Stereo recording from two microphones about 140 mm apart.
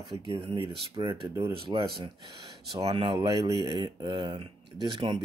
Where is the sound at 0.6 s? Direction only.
40° right (ahead or behind).